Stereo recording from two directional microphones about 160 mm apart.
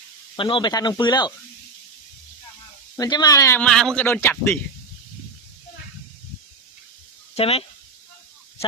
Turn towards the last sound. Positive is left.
turn(degrees=40)  # may be behind; listen again after turning